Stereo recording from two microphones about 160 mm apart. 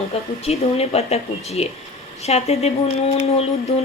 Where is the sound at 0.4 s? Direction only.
40° left (ahead or behind).